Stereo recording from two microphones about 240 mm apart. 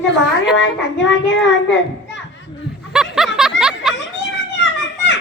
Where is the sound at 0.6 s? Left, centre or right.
Left.